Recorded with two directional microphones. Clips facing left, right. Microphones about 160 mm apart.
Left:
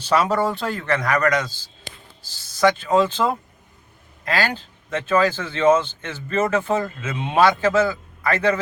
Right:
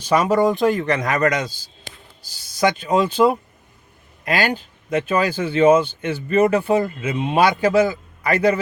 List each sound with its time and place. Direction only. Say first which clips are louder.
0.0 s speech: right 3 dB; 10° right (ahead or behind)
4.3 s speech: right 2 dB; 15° right (ahead or behind)